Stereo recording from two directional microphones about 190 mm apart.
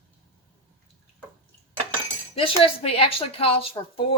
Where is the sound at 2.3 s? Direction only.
30° left (ahead or behind).